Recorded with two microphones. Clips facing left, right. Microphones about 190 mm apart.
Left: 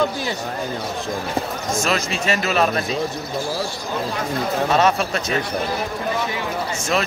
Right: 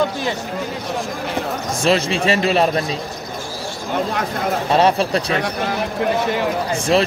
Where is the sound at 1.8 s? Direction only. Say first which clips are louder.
Right 7 dB; 30° right (ahead or behind).